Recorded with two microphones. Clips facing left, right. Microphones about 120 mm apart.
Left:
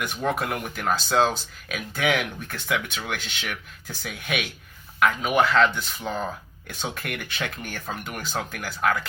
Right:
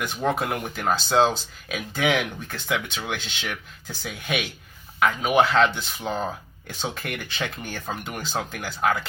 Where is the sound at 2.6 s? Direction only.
15° right (ahead or behind).